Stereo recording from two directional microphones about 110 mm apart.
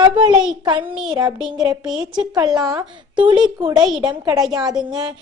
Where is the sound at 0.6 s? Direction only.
45° right (ahead or behind).